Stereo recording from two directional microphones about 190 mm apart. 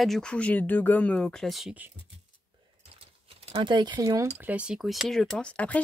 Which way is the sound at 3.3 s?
30° right (ahead or behind).